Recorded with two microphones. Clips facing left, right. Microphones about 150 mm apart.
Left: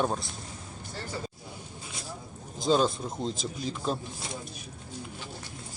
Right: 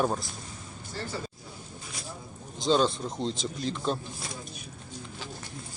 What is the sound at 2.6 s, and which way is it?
A man's voice, 5° left (ahead or behind).